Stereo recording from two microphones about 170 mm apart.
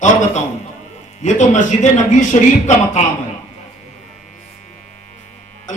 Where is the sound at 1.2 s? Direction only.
45° left (ahead or behind).